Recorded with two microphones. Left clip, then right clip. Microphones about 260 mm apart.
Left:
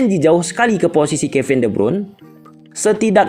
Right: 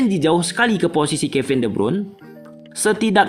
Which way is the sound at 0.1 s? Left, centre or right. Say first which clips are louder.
Left 4 dB; centre.